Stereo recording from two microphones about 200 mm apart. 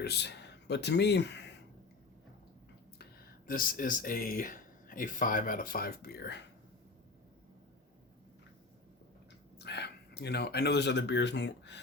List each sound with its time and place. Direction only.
0.0 s speech: 55° left (ahead or behind)
3.0 s speech: 50° left (ahead or behind)
9.6 s speech: 55° left (ahead or behind)